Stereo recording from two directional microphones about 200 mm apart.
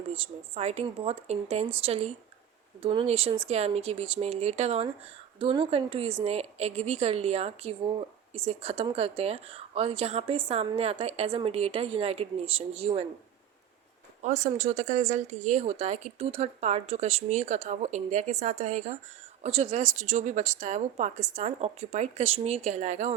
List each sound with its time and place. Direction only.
0.1 s a woman's voice: 30° right (ahead or behind)
14.2 s speech: 35° right (ahead or behind)